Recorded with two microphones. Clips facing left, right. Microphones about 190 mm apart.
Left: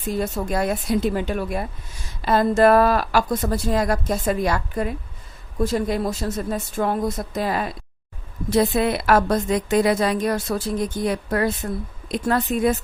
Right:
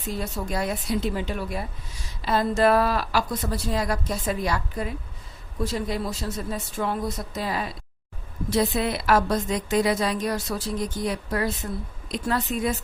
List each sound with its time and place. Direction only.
0.2 s a woman's voice: 50° left (ahead or behind)